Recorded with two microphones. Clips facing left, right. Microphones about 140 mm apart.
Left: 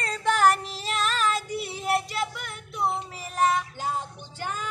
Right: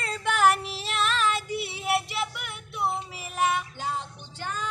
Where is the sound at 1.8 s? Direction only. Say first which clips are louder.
Left 2 dB; 5° right (ahead or behind).